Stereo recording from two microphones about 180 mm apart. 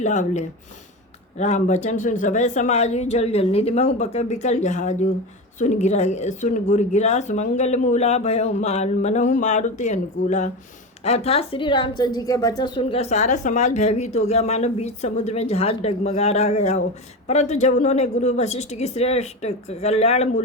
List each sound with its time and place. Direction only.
0.0 s a woman's voice: 40° left (ahead or behind)